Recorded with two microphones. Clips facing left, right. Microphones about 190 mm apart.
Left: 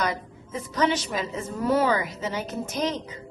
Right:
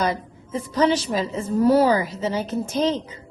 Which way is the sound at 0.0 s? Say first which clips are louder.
Right 4 dB; 30° right (ahead or behind).